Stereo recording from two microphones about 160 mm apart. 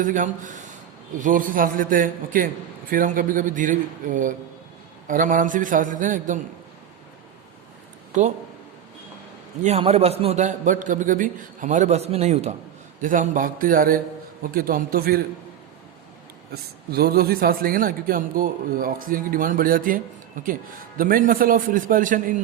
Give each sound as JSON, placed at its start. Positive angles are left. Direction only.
{"t": 0.0, "sound": "a man's voice", "side_deg": -55}
{"t": 9.6, "sound": "a man's voice", "side_deg": -40}
{"t": 13.0, "sound": "a man's voice", "side_deg": -55}
{"t": 16.9, "sound": "a man's voice", "side_deg": -75}